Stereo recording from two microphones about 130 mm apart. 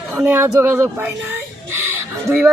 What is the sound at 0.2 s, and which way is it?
Speech, 25° right (ahead or behind).